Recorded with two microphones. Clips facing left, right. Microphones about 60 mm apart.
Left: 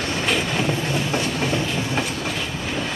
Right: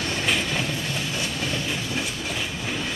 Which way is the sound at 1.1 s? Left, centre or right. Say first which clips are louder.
Left 6 dB; left.